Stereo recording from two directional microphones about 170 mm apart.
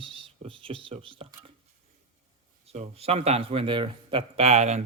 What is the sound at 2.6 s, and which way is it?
A man's voice, 40° right (ahead or behind).